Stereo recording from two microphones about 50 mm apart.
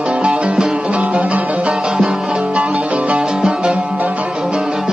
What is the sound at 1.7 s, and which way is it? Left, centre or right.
Music, centre.